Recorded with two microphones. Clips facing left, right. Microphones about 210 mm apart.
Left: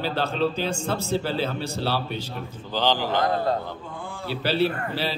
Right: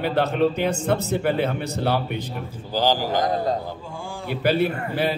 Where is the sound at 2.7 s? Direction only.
10° right (ahead or behind).